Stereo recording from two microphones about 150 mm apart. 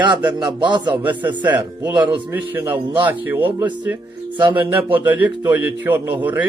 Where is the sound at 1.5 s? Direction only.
10° right (ahead or behind).